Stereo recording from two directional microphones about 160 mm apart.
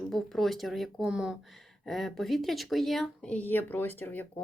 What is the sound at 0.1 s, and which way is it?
Speech, centre (ahead or behind).